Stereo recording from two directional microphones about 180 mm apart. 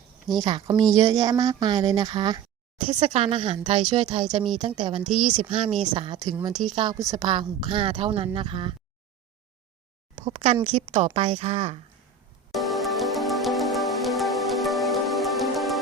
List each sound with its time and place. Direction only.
0.4 s a woman's voice: 25° right (ahead or behind)
3.0 s a woman's voice: 35° right (ahead or behind)
5.0 s a woman's voice: 5° right (ahead or behind)
5.5 s a woman's voice: 30° right (ahead or behind)
6.5 s a woman's voice: centre (ahead or behind)
6.7 s a woman's voice: 20° right (ahead or behind)
10.2 s speech: 25° right (ahead or behind)
12.5 s music: centre (ahead or behind)